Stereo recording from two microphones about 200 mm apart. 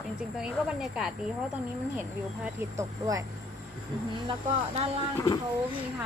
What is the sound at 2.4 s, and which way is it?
Speech, 15° right (ahead or behind).